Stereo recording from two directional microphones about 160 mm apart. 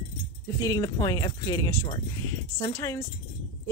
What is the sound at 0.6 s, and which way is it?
Speech, 20° left (ahead or behind).